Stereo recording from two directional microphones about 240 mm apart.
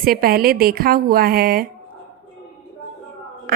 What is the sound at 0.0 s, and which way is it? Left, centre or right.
A woman's voice, right.